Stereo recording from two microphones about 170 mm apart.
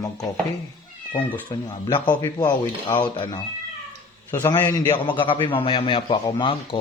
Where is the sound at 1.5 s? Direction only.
25° left (ahead or behind).